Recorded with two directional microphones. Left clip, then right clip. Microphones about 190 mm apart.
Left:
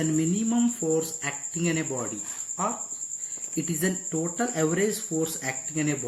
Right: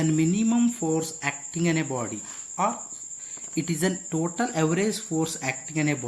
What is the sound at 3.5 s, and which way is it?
Speech, 55° right (ahead or behind).